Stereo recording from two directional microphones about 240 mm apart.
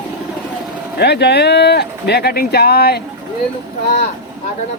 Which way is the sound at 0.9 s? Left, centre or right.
Left.